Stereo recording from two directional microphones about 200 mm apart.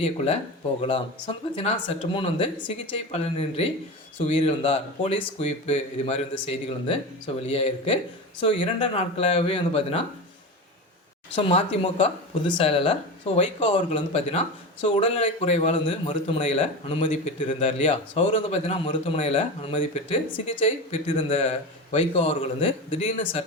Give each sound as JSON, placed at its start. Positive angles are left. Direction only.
{"t": 0.8, "sound": "speech", "side_deg": 25}
{"t": 11.3, "sound": "speech", "side_deg": 30}